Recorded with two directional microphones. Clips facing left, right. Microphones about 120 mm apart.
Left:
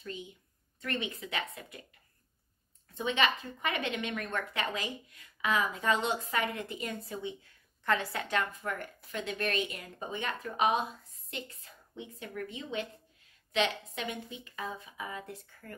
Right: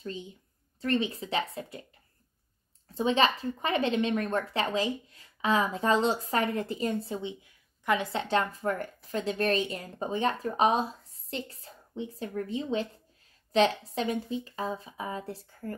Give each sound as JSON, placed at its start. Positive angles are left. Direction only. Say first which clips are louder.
{"t": 0.0, "sound": "speech", "louder": "right 4 dB", "side_deg": -30}
{"t": 2.9, "sound": "a woman's voice", "louder": "right 5 dB", "side_deg": -35}